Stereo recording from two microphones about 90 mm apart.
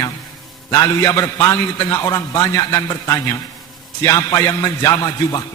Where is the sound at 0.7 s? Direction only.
40° left (ahead or behind).